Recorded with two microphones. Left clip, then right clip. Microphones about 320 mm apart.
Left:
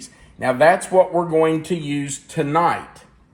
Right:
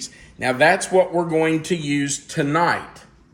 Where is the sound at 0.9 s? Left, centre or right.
Left.